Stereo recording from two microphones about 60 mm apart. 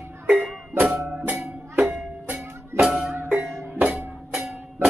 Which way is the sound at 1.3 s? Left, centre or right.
Right.